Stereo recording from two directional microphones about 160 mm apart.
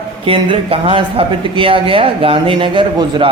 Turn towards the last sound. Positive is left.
turn(degrees=-30)  # may be behind; listen again after turning